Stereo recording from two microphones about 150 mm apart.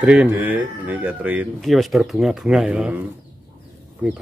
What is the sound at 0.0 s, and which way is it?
Speech, 10° right (ahead or behind).